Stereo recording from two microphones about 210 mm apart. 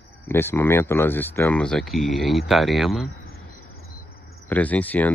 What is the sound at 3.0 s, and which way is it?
Cricket, 45° left (ahead or behind).